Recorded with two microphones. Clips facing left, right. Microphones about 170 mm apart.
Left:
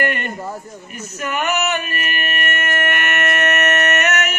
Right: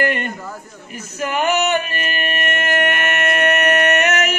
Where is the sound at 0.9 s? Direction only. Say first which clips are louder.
Right 2 dB; 30° right (ahead or behind).